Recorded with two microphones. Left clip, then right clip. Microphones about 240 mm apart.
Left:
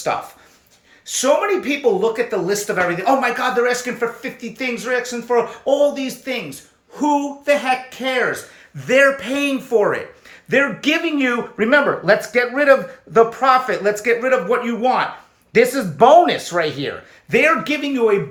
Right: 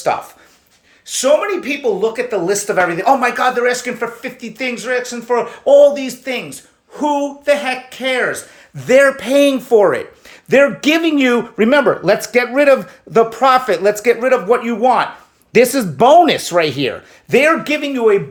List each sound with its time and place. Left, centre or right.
1.0 s speech: centre
8.8 s speech: right
15.5 s speech: right
17.6 s speech: centre